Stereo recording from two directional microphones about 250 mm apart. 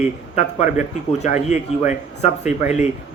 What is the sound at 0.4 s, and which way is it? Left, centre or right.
Speech, left.